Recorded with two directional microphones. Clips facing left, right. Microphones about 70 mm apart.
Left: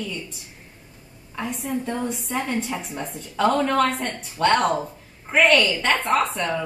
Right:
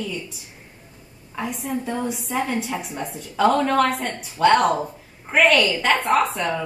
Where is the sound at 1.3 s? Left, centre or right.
Centre.